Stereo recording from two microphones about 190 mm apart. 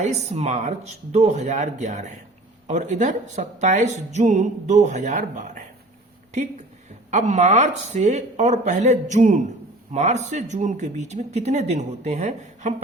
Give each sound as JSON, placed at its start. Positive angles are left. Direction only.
{"t": 0.0, "sound": "a woman's voice", "side_deg": -35}
{"t": 7.1, "sound": "a woman's voice", "side_deg": -40}